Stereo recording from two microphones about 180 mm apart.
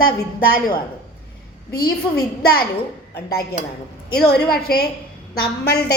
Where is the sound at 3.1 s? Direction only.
60° left (ahead or behind).